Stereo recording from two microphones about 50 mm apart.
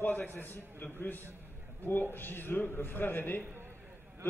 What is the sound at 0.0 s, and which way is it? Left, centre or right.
A man's voice, left.